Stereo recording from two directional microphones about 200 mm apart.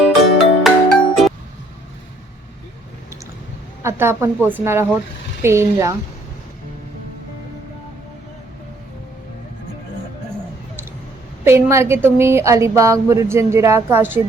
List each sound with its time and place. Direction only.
0.0 s music: centre (ahead or behind)
3.8 s speech: 10° right (ahead or behind)
11.4 s speech: 15° right (ahead or behind)